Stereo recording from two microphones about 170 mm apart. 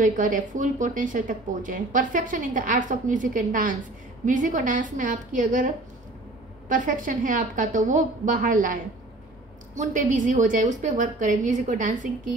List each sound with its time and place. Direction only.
0.0 s speech: 50° right (ahead or behind)
6.7 s speech: 50° right (ahead or behind)
9.8 s speech: 50° right (ahead or behind)